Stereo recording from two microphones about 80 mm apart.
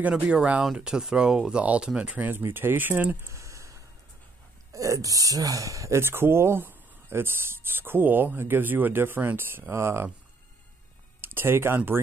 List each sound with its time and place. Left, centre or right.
0.0 s speech: centre; by 3.3 s right
3.3 s a sound: right
4.7 s speech: right
11.1 s speech: right